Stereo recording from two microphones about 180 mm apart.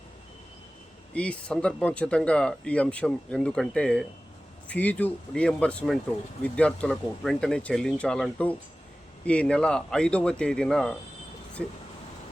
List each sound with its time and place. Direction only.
1.1 s speech: 5° left (ahead or behind)